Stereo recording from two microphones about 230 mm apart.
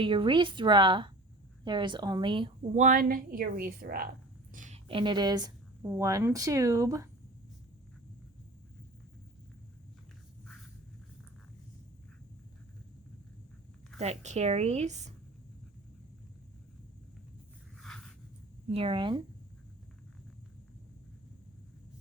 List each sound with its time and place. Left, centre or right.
0.0 s a woman's voice: right
14.0 s a woman's voice: right
17.7 s a sound: centre
18.7 s a woman's voice: right